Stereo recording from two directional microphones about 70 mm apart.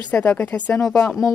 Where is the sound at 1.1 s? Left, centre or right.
Centre.